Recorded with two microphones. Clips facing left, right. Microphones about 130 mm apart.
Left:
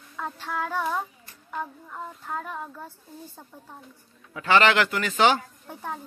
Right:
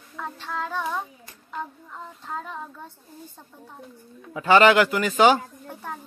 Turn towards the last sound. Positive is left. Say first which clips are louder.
# left 1 dB
turn(degrees=10)  # may be behind; listen again after turning